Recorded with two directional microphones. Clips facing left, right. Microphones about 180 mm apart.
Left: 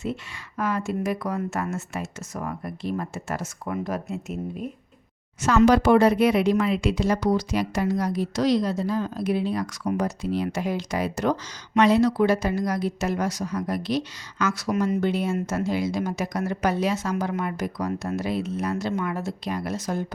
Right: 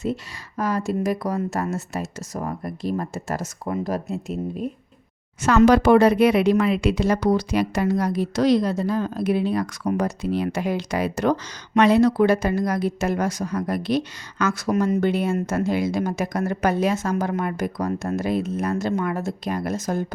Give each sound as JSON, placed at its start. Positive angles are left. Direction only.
{"t": 0.0, "sound": "speech", "side_deg": -40}
{"t": 5.4, "sound": "a woman's voice", "side_deg": -60}